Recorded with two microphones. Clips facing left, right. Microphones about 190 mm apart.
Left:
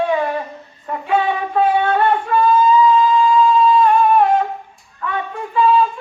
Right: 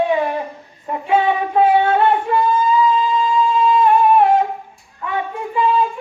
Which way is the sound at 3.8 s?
20° right (ahead or behind).